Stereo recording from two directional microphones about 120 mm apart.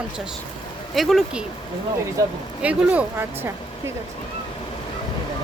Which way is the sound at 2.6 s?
10° right (ahead or behind).